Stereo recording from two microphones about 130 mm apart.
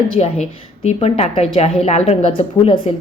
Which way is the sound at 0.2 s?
55° left (ahead or behind).